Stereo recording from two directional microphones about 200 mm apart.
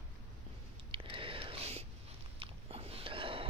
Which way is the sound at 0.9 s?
25° right (ahead or behind).